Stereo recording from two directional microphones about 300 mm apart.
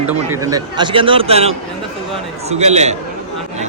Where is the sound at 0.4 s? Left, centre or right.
Centre.